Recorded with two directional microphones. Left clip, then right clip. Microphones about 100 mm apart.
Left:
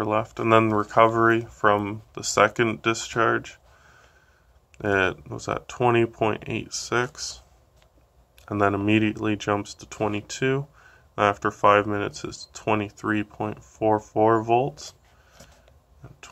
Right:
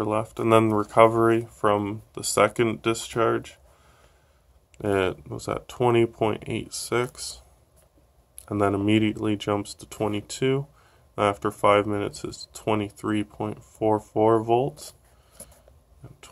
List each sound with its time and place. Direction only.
0.0 s speech: 20° right (ahead or behind)